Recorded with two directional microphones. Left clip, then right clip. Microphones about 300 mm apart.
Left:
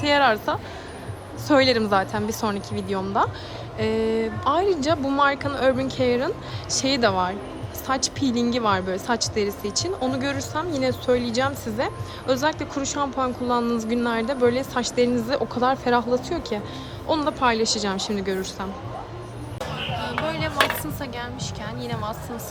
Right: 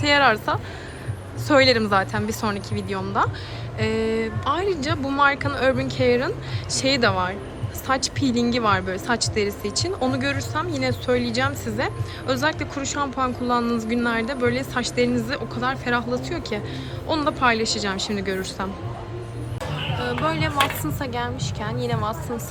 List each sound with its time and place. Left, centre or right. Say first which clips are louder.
0.0 s a woman's voice: right 1 dB; centre
20.1 s music: right 4 dB; centre
21.0 s a woman's voice: right 4 dB; centre